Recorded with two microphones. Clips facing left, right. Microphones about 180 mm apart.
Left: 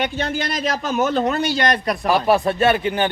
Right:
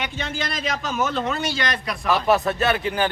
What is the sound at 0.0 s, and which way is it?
A man's voice, 45° left (ahead or behind).